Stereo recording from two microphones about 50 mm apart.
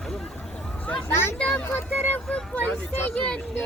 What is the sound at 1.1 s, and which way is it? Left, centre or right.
Speech, left.